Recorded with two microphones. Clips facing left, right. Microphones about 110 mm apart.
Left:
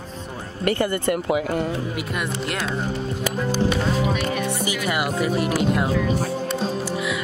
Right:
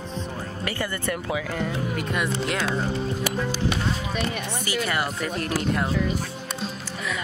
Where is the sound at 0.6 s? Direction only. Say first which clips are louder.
Left 9 dB; 50° left (ahead or behind).